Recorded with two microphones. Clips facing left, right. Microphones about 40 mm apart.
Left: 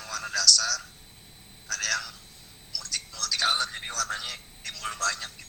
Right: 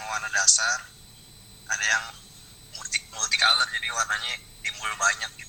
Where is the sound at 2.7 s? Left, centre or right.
Right.